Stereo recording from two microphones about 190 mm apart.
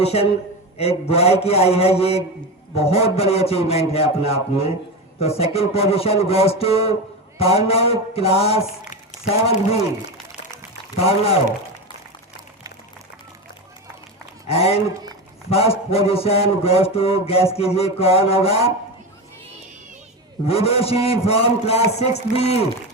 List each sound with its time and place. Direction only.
0.0 s a man's voice: 30° left (ahead or behind)
10.9 s a man's voice: 30° left (ahead or behind)
14.4 s a man's voice: 30° left (ahead or behind)
20.5 s a man's voice: 30° left (ahead or behind)